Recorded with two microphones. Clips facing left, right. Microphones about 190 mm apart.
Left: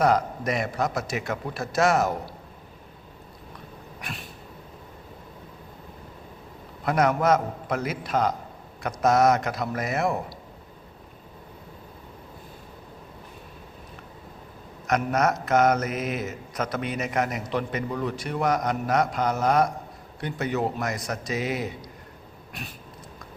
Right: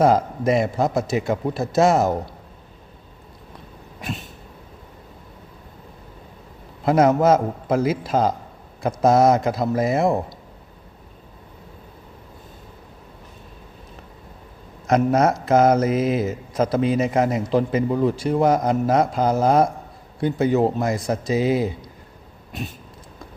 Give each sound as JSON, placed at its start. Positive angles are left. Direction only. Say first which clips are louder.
{"t": 0.0, "sound": "speech", "louder": "right 5 dB", "side_deg": -25}
{"t": 6.8, "sound": "speech", "louder": "right 6 dB", "side_deg": -25}
{"t": 14.8, "sound": "speech", "louder": "right 6 dB", "side_deg": -30}